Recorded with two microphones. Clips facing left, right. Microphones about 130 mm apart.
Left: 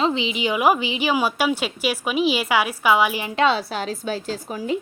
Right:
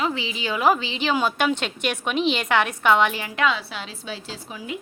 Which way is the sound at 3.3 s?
30° left (ahead or behind).